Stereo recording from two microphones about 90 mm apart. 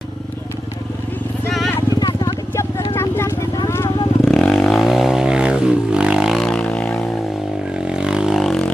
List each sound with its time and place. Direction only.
1.8 s vehicle: 45° left (ahead or behind); by 3.3 s 30° left (ahead or behind)
4.2 s vehicle: 5° left (ahead or behind)
7.8 s vehicle: 10° right (ahead or behind)